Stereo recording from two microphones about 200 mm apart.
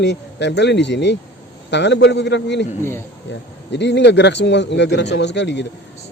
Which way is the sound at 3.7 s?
60° left (ahead or behind).